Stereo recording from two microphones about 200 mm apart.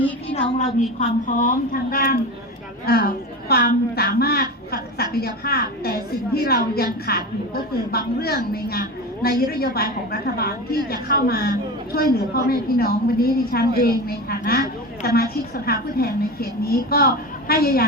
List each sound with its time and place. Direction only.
0.9 s a woman's voice: 40° left (ahead or behind)